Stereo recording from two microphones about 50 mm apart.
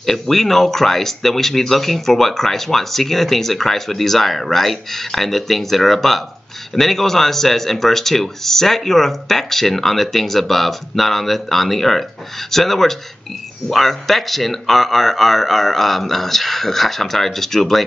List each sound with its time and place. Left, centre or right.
0.0 s speech: centre